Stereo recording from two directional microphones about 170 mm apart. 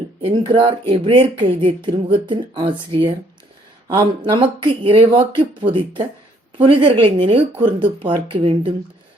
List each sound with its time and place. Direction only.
0.2 s speech: 30° right (ahead or behind)